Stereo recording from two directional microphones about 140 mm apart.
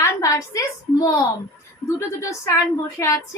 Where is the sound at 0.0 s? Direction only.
20° left (ahead or behind).